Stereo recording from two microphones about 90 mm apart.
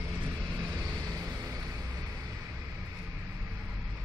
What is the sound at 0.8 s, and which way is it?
Vehicle, 40° right (ahead or behind).